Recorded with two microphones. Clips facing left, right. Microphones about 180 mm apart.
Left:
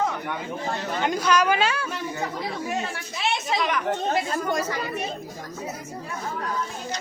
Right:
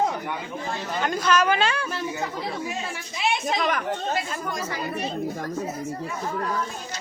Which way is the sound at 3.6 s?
45° right (ahead or behind).